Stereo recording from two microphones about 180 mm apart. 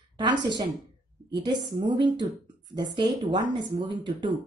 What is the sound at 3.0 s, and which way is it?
A woman's voice, 25° right (ahead or behind).